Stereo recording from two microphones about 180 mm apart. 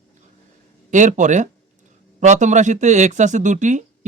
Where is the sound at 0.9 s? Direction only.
45° right (ahead or behind).